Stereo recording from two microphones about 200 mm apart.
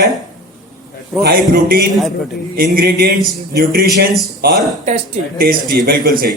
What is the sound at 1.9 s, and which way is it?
Speech, centre (ahead or behind).